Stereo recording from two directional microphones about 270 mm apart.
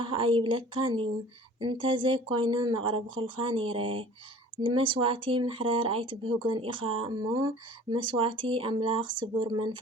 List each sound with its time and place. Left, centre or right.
0.0 s speech: centre